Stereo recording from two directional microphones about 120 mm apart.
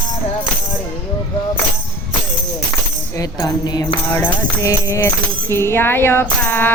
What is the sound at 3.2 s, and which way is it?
Music, 30° left (ahead or behind).